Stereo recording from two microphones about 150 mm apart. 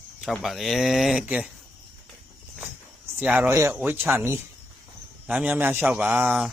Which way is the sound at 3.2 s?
10° right (ahead or behind).